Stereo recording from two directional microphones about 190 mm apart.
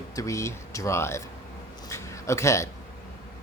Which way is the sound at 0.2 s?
15° left (ahead or behind).